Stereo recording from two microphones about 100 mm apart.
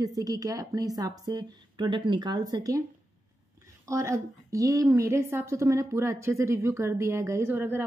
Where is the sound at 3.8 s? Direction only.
30° right (ahead or behind).